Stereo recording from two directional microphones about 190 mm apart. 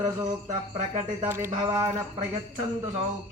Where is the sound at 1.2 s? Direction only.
10° right (ahead or behind).